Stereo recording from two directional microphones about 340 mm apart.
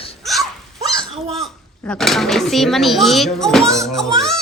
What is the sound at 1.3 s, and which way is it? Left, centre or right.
Speech, centre.